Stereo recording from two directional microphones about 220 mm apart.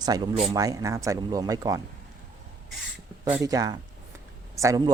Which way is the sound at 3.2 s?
15° right (ahead or behind).